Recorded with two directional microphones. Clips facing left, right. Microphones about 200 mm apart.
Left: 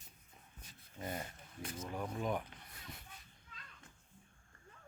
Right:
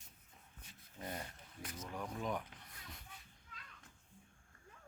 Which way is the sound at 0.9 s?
5° left (ahead or behind).